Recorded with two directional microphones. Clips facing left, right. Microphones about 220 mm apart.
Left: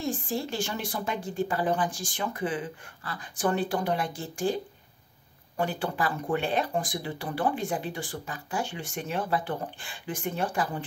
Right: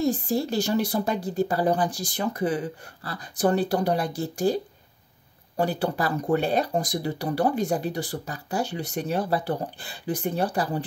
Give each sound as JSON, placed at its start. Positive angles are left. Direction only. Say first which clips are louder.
{"t": 0.0, "sound": "speech", "louder": "right 6 dB", "side_deg": -40}
{"t": 5.6, "sound": "speech", "louder": "right 4 dB", "side_deg": -40}